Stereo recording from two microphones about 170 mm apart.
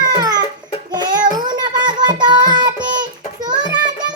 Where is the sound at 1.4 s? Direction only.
25° right (ahead or behind).